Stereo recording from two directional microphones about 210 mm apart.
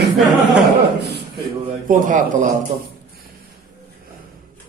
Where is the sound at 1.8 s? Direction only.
40° right (ahead or behind).